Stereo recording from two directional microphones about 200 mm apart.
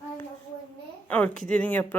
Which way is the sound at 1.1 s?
5° left (ahead or behind).